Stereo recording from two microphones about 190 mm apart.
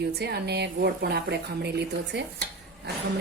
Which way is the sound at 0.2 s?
60° right (ahead or behind).